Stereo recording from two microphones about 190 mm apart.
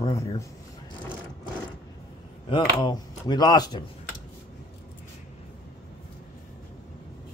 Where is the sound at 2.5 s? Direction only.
25° left (ahead or behind).